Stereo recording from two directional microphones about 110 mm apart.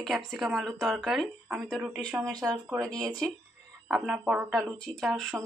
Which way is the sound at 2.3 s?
35° right (ahead or behind).